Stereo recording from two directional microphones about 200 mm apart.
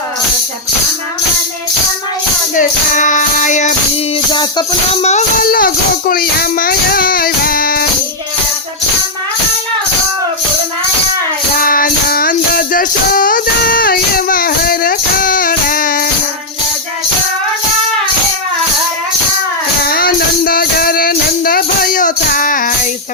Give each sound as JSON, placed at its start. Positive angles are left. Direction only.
{"t": 2.6, "sound": "music", "side_deg": 40}
{"t": 4.3, "sound": "music", "side_deg": 20}
{"t": 5.0, "sound": "music", "side_deg": 40}
{"t": 11.6, "sound": "music", "side_deg": 45}
{"t": 19.9, "sound": "music", "side_deg": 50}